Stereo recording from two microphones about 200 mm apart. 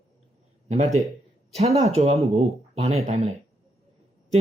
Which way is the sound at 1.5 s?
30° right (ahead or behind).